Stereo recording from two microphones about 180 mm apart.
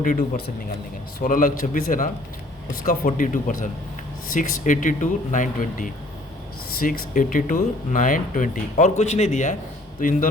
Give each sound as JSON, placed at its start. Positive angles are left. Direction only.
{"t": 0.0, "sound": "speech", "side_deg": 50}